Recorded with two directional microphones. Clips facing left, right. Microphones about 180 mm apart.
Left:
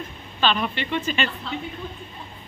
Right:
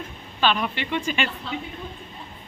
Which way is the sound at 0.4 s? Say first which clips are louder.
Even; 10° right (ahead or behind).